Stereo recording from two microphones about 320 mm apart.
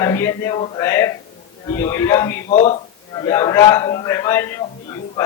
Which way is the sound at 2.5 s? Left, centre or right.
Left.